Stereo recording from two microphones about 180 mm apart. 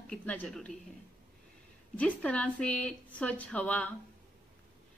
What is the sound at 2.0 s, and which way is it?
A woman's voice, 10° left (ahead or behind).